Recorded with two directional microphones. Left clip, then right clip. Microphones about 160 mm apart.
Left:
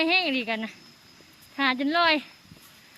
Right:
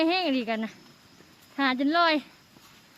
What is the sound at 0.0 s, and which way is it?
Speech, 25° right (ahead or behind).